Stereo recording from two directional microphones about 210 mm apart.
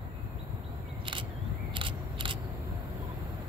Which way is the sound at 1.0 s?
25° right (ahead or behind).